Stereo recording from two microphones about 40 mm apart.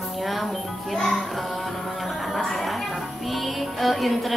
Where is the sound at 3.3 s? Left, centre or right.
Centre.